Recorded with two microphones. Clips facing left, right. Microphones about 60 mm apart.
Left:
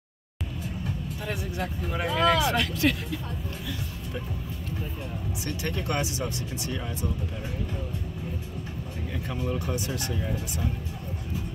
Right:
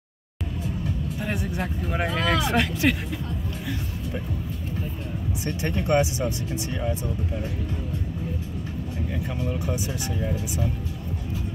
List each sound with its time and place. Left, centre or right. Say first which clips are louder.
2.1 s speech: left 1 dB; centre
5.4 s speech: right 4 dB; right
9.4 s speech: even; centre